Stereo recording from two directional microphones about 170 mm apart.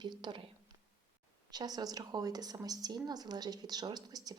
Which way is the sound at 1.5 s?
25° right (ahead or behind).